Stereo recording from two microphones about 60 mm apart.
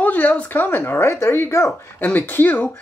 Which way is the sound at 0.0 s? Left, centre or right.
Left.